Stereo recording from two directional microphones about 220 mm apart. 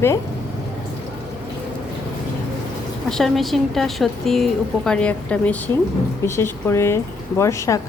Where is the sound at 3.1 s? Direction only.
Centre (ahead or behind).